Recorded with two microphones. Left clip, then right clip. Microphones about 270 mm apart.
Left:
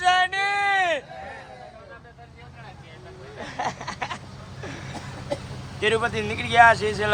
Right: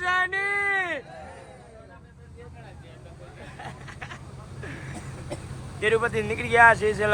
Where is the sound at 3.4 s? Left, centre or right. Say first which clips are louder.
Left 12 dB; left.